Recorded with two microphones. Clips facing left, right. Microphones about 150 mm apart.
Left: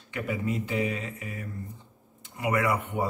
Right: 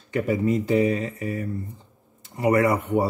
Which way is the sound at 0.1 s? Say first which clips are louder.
Right 8 dB; 40° right (ahead or behind).